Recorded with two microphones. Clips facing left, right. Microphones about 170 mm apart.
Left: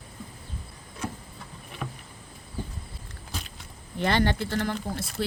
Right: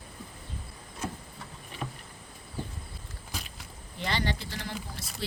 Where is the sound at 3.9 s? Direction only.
55° left (ahead or behind).